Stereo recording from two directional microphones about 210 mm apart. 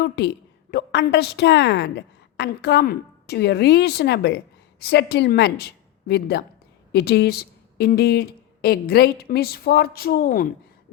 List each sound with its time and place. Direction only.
0.7 s a woman's voice: 55° left (ahead or behind)